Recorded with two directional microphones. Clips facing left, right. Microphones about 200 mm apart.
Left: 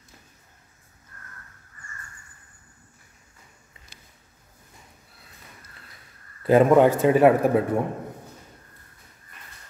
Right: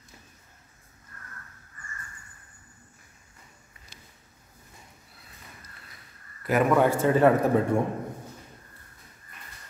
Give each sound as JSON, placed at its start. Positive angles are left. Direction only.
{"t": 6.4, "sound": "a man's voice", "side_deg": 30}
{"t": 7.0, "sound": "a man's voice", "side_deg": 15}